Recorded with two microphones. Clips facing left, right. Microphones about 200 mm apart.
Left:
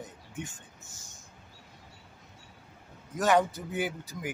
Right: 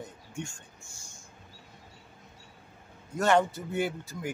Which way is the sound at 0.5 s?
20° left (ahead or behind).